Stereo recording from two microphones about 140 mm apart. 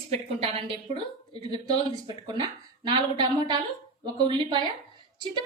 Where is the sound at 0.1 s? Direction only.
45° right (ahead or behind).